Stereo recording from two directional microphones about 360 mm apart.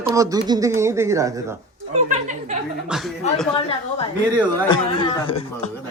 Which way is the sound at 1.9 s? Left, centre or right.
Centre.